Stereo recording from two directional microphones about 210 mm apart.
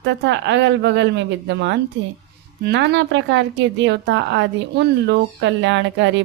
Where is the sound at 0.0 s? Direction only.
55° right (ahead or behind).